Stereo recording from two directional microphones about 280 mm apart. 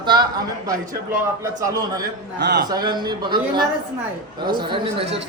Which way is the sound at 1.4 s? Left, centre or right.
Centre.